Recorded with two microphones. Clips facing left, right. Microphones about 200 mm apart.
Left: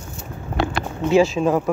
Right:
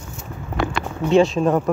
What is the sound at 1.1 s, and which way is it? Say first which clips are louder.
Speech: right 1 dB; centre (ahead or behind).